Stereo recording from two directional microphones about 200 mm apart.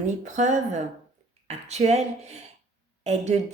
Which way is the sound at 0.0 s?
35° right (ahead or behind).